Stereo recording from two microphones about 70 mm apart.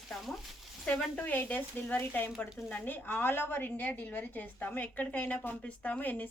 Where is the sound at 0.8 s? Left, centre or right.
Left.